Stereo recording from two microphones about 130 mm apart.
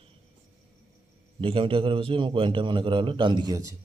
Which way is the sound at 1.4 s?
40° right (ahead or behind).